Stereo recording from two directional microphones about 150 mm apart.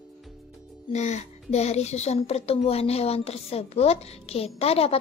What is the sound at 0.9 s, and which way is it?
A woman's voice, 50° left (ahead or behind).